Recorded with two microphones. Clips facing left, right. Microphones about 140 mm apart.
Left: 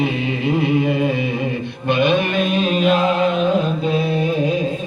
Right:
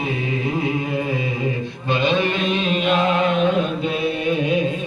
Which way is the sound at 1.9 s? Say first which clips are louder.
Left 3 dB; 55° left (ahead or behind).